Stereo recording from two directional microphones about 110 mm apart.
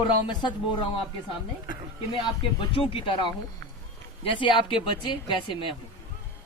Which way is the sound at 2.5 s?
55° left (ahead or behind).